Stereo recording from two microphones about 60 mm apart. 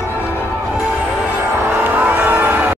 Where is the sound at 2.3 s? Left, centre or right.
Right.